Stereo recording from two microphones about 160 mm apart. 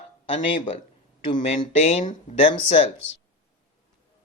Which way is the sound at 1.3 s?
30° left (ahead or behind).